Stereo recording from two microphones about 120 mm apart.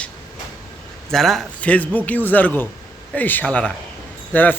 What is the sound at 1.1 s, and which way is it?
A man's voice, centre (ahead or behind).